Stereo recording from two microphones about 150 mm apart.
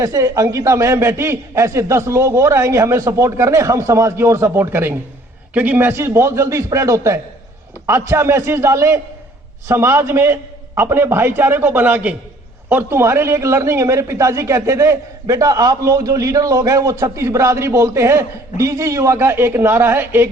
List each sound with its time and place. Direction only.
0.0 s a man's voice: 25° right (ahead or behind)